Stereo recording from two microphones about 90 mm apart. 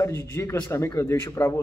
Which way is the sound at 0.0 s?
30° left (ahead or behind).